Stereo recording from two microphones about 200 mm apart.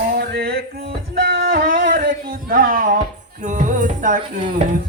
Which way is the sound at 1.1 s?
50° right (ahead or behind).